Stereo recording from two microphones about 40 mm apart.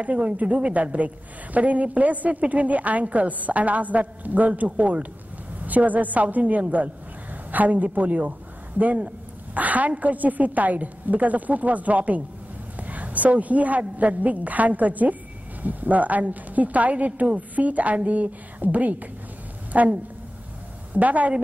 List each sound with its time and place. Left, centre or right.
0.0 s a man's voice: right
20.9 s a man's voice: right